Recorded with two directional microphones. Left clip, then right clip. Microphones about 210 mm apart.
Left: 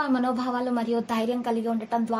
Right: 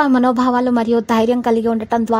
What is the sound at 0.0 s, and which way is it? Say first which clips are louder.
A woman's voice: right 11 dB; 45° right (ahead or behind).